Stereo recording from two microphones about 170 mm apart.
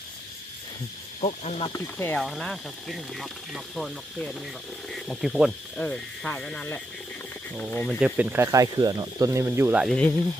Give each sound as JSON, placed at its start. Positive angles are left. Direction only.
{"t": 1.2, "sound": "speech", "side_deg": 35}
{"t": 1.7, "sound": "speech", "side_deg": 15}
{"t": 2.2, "sound": "speech", "side_deg": 0}
{"t": 7.9, "sound": "speech", "side_deg": -10}
{"t": 9.8, "sound": "speech", "side_deg": 5}